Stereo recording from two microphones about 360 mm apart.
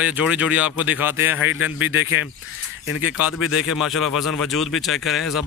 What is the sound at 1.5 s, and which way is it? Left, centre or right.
Speech, left.